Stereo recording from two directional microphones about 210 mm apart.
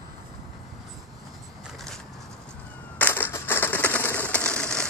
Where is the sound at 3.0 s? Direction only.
10° left (ahead or behind).